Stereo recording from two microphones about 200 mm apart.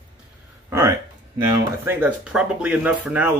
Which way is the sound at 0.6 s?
15° right (ahead or behind).